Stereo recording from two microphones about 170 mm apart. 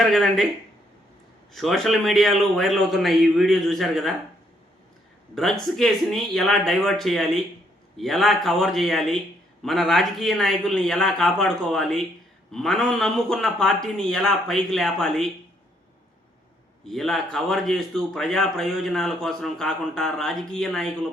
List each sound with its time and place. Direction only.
0.0 s a man's voice: centre (ahead or behind)
1.5 s a man's voice: centre (ahead or behind)
5.3 s a man's voice: centre (ahead or behind)
16.8 s a man's voice: centre (ahead or behind)